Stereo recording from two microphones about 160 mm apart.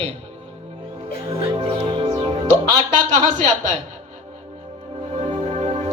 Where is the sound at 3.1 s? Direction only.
50° right (ahead or behind).